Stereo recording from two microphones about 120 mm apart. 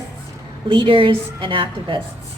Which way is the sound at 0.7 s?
45° right (ahead or behind).